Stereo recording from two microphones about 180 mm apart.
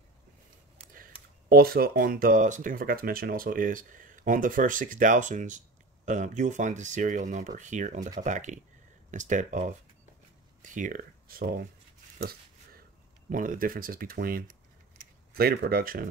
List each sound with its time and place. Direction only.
0.9 s speech: 55° right (ahead or behind)
12.2 s a sound: 60° right (ahead or behind)
13.3 s speech: 50° right (ahead or behind)